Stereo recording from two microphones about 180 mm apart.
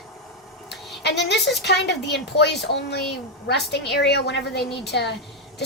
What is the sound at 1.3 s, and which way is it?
A woman's voice, 70° left (ahead or behind).